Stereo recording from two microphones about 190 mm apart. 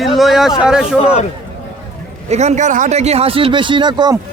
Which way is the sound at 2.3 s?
35° right (ahead or behind).